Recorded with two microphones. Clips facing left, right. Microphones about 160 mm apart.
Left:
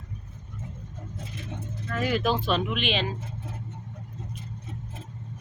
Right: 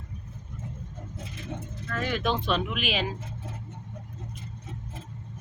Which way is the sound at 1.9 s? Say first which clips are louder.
Left 3 dB; 10° left (ahead or behind).